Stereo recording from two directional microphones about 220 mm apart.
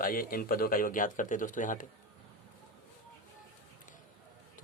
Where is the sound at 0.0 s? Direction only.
40° left (ahead or behind).